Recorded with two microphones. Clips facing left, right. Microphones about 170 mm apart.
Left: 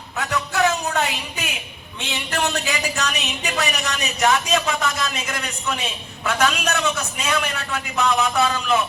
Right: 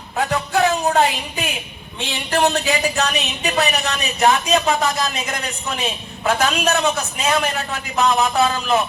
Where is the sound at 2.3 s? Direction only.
35° right (ahead or behind).